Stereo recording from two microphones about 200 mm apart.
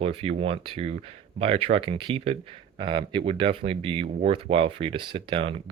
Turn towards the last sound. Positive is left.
turn(degrees=-25)  # may be behind; listen again after turning